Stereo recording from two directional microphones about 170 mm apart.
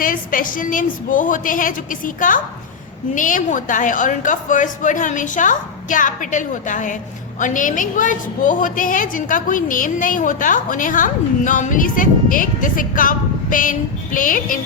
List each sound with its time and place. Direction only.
0.0 s a woman's voice: 55° left (ahead or behind)